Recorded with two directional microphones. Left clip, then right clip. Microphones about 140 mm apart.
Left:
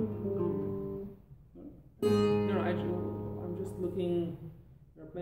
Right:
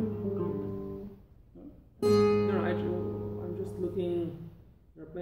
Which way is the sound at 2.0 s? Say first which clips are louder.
Right 4 dB; 5° right (ahead or behind).